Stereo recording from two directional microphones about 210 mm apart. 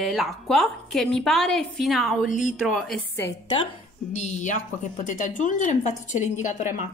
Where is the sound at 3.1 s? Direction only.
10° left (ahead or behind).